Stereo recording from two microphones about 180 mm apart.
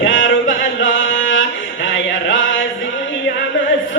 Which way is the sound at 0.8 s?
90° left.